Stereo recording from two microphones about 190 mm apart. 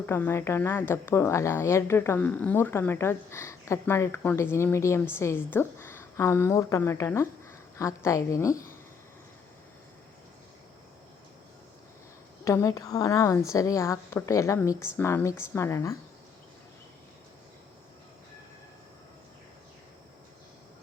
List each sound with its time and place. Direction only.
0.0 s a woman's voice: 10° left (ahead or behind)
12.5 s a woman's voice: 15° left (ahead or behind)